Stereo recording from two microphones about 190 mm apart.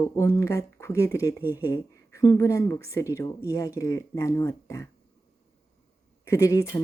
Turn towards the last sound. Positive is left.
turn(degrees=15)  # may be behind; listen again after turning